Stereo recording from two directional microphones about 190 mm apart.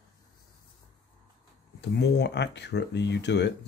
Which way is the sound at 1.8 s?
60° left (ahead or behind).